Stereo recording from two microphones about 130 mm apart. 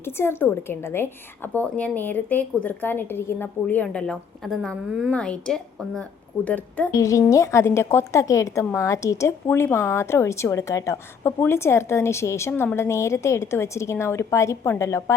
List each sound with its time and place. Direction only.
0.0 s a woman's voice: 20° left (ahead or behind)
4.7 s a woman's voice: 10° right (ahead or behind)
5.1 s a woman's voice: 10° left (ahead or behind)
6.9 s a woman's voice: 25° left (ahead or behind)